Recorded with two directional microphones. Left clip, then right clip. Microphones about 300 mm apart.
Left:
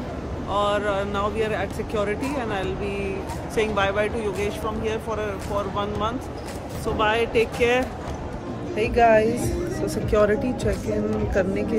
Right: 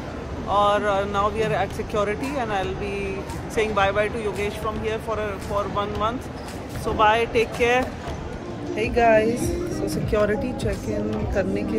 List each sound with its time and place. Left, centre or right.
0.5 s speech: centre